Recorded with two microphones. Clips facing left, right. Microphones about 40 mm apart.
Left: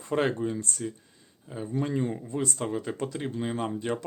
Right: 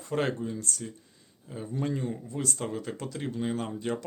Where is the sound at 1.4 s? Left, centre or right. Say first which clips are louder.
Left 2 dB; centre.